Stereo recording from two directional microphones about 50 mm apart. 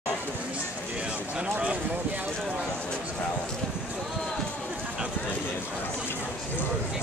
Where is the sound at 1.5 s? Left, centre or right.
Right.